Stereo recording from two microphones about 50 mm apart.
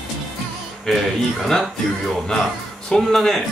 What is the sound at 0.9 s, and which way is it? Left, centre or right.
Music, centre.